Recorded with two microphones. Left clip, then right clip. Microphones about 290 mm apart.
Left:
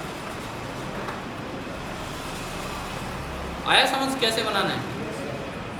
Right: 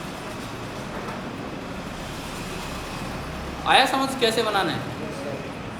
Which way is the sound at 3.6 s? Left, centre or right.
Right.